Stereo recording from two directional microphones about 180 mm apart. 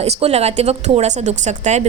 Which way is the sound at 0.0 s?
35° right (ahead or behind).